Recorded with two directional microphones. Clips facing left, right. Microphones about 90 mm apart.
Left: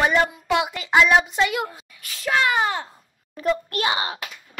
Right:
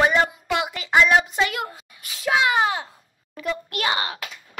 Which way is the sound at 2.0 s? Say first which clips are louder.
Right 1 dB; 10° right (ahead or behind).